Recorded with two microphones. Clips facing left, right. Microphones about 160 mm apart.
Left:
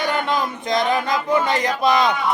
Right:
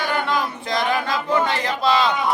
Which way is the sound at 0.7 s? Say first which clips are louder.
Left 2 dB; 20° left (ahead or behind).